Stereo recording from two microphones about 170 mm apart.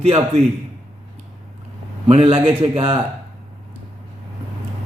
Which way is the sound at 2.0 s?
35° right (ahead or behind).